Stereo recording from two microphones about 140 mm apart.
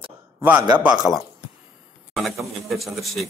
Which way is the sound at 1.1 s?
20° left (ahead or behind).